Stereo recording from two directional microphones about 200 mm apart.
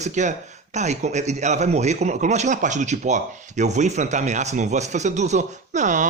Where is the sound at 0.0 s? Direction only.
35° right (ahead or behind).